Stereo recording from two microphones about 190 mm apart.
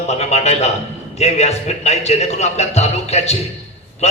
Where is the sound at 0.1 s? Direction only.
35° left (ahead or behind).